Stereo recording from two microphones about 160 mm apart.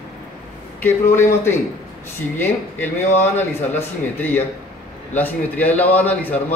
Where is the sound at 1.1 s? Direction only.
15° left (ahead or behind).